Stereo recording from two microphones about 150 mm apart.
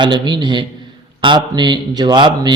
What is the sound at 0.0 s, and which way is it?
A man's voice, 30° right (ahead or behind).